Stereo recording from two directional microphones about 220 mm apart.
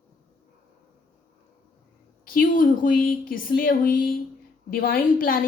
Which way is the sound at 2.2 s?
40° left (ahead or behind).